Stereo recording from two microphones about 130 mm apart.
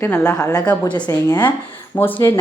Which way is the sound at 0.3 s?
30° left (ahead or behind).